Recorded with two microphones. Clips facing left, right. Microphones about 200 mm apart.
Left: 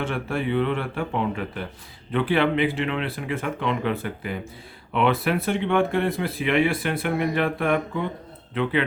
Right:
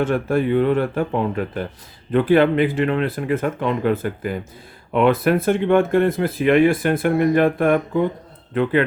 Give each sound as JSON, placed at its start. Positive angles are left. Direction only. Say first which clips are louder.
{"t": 0.0, "sound": "speech", "louder": "right 7 dB", "side_deg": -45}